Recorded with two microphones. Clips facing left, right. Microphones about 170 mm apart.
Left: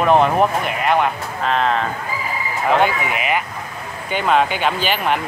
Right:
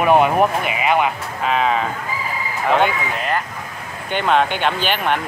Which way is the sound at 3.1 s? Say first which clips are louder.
Left 1 dB; 10° left (ahead or behind).